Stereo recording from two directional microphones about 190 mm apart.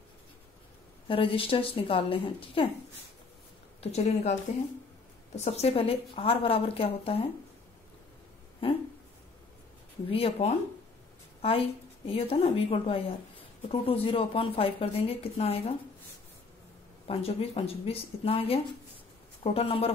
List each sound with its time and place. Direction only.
1.0 s a woman's voice: 30° left (ahead or behind)
3.8 s a woman's voice: 35° left (ahead or behind)
8.6 s a woman's voice: 30° left (ahead or behind)
10.0 s a woman's voice: 30° left (ahead or behind)
12.1 s a woman's voice: 30° left (ahead or behind)
17.1 s a woman's voice: 30° left (ahead or behind)